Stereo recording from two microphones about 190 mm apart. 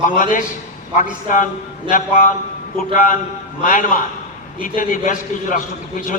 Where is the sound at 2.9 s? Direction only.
45° left (ahead or behind).